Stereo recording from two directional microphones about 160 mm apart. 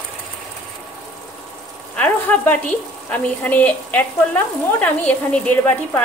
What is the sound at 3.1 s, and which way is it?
A woman's voice, 10° left (ahead or behind).